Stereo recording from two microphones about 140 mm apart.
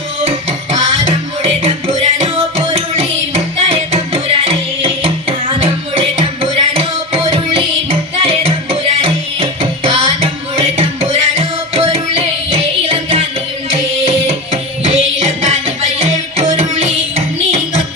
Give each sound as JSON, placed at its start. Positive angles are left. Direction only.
{"t": 2.1, "sound": "music", "side_deg": -50}